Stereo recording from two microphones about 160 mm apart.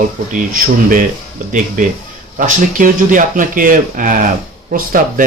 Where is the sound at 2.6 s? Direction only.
55° right (ahead or behind).